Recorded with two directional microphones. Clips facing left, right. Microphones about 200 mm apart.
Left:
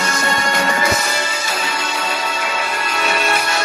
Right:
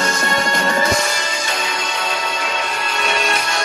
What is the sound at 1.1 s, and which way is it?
Music, 5° left (ahead or behind).